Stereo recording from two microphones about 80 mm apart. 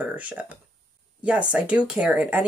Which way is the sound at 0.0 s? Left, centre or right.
Centre.